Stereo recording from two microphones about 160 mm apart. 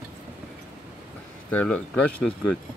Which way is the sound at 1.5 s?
10° left (ahead or behind).